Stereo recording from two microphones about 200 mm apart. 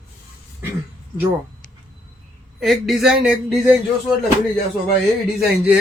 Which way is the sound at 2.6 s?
Centre (ahead or behind).